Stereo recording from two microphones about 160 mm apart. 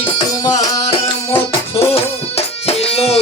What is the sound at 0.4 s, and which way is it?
Music, 20° left (ahead or behind).